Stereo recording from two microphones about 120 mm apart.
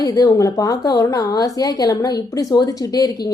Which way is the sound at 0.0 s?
30° left (ahead or behind).